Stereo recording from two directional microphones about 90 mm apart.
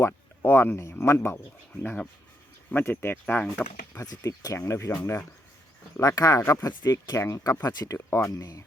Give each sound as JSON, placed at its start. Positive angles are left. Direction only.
{"t": 0.0, "sound": "speech", "side_deg": 25}
{"t": 1.7, "sound": "speech", "side_deg": 15}
{"t": 4.0, "sound": "speech", "side_deg": 45}
{"t": 6.0, "sound": "speech", "side_deg": 40}
{"t": 7.9, "sound": "speech", "side_deg": 30}
{"t": 8.3, "sound": "speech", "side_deg": 40}